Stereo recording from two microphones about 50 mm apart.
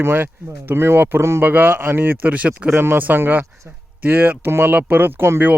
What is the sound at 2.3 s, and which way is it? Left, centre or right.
Speech, right.